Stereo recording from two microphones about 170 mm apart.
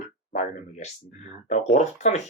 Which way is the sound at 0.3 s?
45° left (ahead or behind).